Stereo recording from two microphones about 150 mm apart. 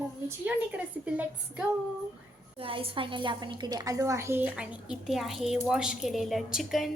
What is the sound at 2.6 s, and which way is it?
A woman's voice, 35° right (ahead or behind).